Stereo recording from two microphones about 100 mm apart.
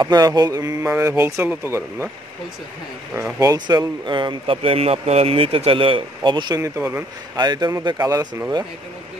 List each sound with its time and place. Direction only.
0.0 s mantra: 40° right (ahead or behind)
0.9 s speech: 25° right (ahead or behind)
3.3 s speech: 40° right (ahead or behind)
6.8 s speech: 20° right (ahead or behind)
7.3 s speech: 45° right (ahead or behind)
7.8 s mantra: 40° right (ahead or behind)